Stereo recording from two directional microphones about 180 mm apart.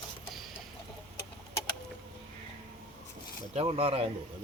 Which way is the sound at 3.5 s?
30° right (ahead or behind).